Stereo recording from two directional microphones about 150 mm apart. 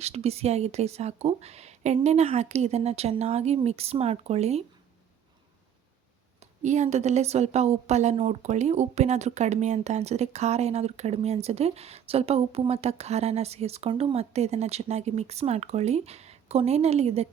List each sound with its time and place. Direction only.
0.0 s a woman's voice: 45° right (ahead or behind)
6.4 s a woman's voice: 50° right (ahead or behind)